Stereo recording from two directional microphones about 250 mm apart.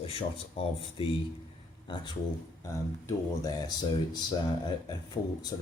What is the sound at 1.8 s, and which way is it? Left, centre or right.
Speech, centre.